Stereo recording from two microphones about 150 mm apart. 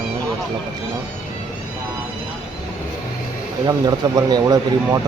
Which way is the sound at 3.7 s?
25° right (ahead or behind).